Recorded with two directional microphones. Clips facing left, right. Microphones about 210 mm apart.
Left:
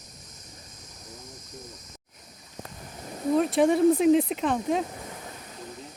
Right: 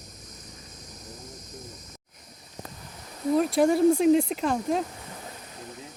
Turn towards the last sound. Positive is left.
turn(degrees=0)  # may be behind; listen again after turning